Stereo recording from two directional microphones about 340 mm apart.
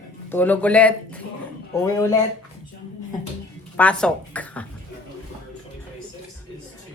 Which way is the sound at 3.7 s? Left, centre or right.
Centre.